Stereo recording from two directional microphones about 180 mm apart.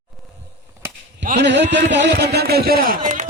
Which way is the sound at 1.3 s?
75° right (ahead or behind).